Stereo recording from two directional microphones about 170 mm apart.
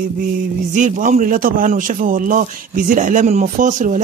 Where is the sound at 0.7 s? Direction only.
50° right (ahead or behind).